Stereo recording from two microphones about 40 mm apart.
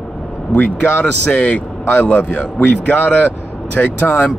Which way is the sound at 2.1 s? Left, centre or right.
Left.